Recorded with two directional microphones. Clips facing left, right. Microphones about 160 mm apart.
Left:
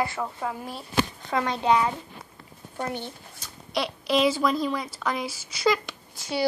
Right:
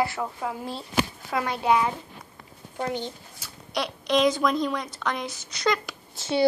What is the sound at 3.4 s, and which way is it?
Speech, centre (ahead or behind).